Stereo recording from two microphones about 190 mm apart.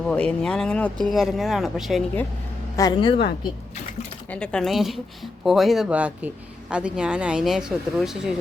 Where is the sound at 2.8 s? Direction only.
25° left (ahead or behind).